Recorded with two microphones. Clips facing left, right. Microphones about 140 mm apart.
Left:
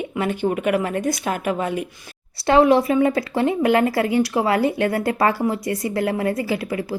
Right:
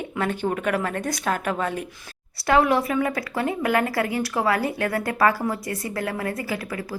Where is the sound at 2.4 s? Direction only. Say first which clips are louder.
Left 5 dB; 25° left (ahead or behind).